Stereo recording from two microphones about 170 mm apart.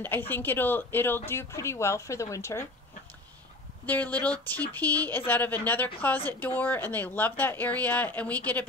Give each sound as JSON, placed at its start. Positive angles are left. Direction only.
{"t": 0.0, "sound": "speech", "side_deg": 10}
{"t": 3.8, "sound": "speech", "side_deg": 10}